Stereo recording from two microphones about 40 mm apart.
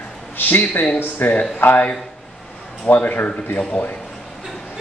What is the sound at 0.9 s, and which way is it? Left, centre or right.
Speech, left.